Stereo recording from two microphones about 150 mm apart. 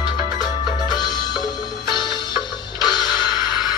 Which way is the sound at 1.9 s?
30° left (ahead or behind).